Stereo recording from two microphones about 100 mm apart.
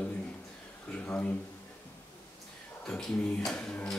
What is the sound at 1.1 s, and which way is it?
Speech, 15° left (ahead or behind).